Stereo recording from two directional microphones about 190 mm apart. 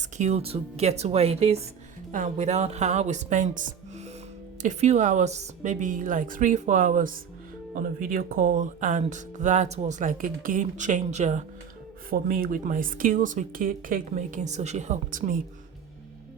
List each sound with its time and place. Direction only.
0.0 s speech: 35° right (ahead or behind)
12.1 s speech: 50° right (ahead or behind)